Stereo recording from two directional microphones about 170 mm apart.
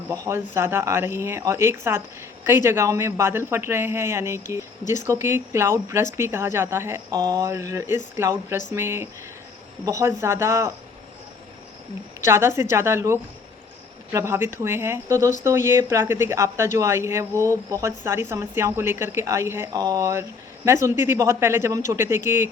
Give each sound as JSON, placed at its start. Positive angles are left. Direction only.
{"t": 0.1, "sound": "a woman's voice", "side_deg": -15}
{"t": 12.2, "sound": "a woman's voice", "side_deg": -15}